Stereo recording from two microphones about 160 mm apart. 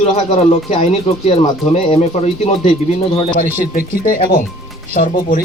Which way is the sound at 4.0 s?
60° left (ahead or behind).